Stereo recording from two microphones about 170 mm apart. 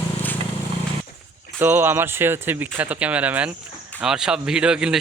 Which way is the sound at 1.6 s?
10° right (ahead or behind).